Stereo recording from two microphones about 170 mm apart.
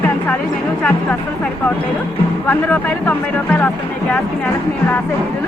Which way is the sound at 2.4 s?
10° left (ahead or behind).